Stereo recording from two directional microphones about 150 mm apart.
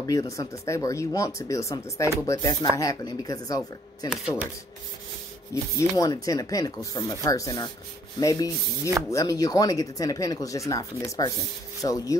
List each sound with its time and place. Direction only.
0.0 s speech: 25° left (ahead or behind)
4.1 s speech: 5° right (ahead or behind)
5.5 s speech: 20° left (ahead or behind)